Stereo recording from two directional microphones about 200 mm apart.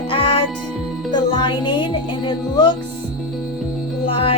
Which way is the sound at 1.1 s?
25° left (ahead or behind).